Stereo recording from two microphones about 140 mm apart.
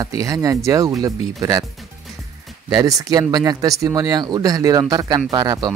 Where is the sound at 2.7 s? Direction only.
30° right (ahead or behind).